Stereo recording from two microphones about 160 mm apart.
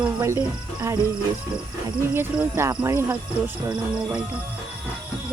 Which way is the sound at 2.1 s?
15° right (ahead or behind).